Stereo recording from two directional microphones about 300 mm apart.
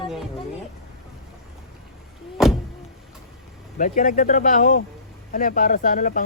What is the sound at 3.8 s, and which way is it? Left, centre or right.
Speech, left.